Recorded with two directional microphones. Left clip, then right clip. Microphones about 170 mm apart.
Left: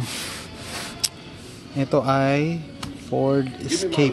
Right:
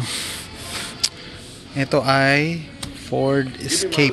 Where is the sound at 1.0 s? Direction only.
15° left (ahead or behind).